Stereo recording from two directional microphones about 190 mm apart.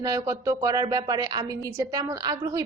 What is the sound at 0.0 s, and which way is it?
A woman's voice, 20° right (ahead or behind).